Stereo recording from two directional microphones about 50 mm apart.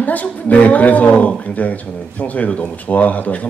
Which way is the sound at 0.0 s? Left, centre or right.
Left.